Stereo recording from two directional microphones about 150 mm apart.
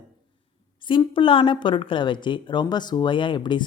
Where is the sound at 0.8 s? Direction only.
35° left (ahead or behind).